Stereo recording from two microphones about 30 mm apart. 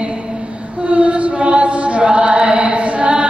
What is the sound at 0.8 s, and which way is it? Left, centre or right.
Chant, right.